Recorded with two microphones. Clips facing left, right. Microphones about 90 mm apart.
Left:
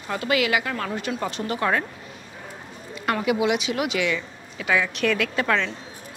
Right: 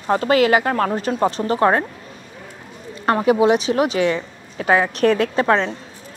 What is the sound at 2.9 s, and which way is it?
Speech, 35° right (ahead or behind).